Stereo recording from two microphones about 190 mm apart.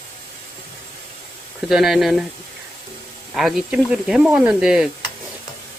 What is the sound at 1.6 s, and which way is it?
Speech, centre (ahead or behind).